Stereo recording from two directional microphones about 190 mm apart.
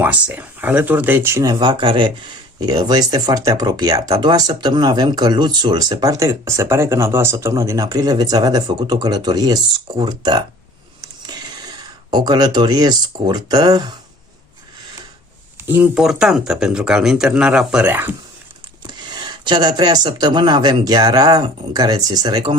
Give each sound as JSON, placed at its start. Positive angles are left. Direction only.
{"t": 0.0, "sound": "speech", "side_deg": -10}
{"t": 11.0, "sound": "a sound", "side_deg": -20}
{"t": 15.6, "sound": "speech", "side_deg": -10}
{"t": 18.9, "sound": "speech", "side_deg": -20}